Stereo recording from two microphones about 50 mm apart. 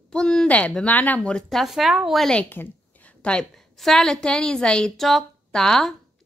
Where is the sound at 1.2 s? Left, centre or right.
Left.